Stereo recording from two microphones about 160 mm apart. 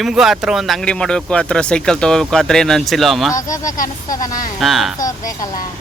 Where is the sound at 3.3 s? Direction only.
20° left (ahead or behind).